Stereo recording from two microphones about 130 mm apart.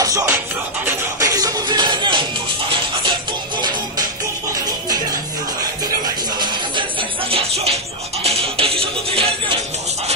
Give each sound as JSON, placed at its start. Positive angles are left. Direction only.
{"t": 0.0, "sound": "music", "side_deg": -25}
{"t": 4.6, "sound": "music", "side_deg": -30}
{"t": 6.4, "sound": "music", "side_deg": -40}